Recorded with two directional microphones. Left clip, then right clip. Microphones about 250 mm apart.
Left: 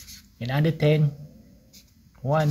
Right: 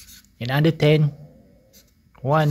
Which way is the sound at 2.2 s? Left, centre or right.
Right.